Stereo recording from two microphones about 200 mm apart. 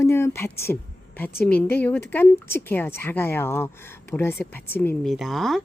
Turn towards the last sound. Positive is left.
turn(degrees=0)  # may be behind; listen again after turning